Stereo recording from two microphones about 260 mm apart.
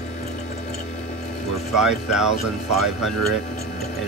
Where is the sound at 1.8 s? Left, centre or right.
Centre.